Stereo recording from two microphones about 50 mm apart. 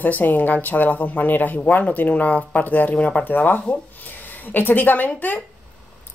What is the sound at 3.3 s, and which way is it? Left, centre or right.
Speech, left.